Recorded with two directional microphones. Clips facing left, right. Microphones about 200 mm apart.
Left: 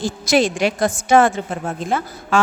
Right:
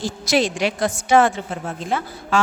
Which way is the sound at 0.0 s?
50° left (ahead or behind).